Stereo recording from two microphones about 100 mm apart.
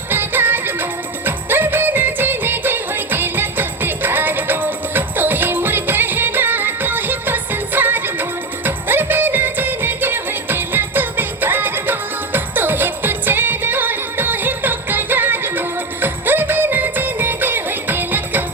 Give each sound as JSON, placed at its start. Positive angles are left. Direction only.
{"t": 0.1, "sound": "music", "side_deg": -20}